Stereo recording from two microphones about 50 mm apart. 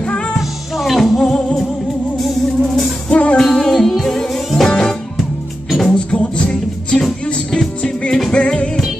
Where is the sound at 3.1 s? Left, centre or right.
Left.